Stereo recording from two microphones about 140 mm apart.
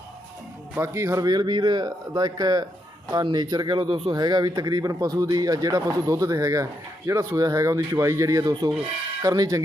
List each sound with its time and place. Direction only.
0.8 s speech: 20° right (ahead or behind)